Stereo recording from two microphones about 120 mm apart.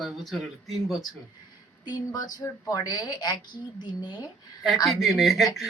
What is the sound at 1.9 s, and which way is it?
A woman's voice, 30° left (ahead or behind).